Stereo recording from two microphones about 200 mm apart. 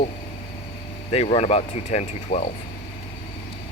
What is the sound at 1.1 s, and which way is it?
Speech, 30° left (ahead or behind).